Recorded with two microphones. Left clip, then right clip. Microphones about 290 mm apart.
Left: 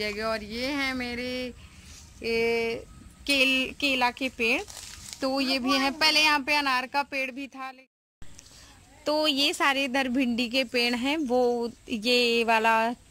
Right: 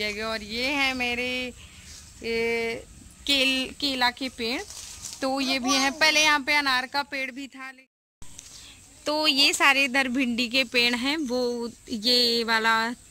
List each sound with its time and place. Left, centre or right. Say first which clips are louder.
0.0 s speech: even; centre
9.0 s speech: right 3 dB; centre